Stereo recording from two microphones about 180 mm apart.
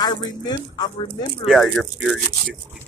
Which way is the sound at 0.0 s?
20° left (ahead or behind).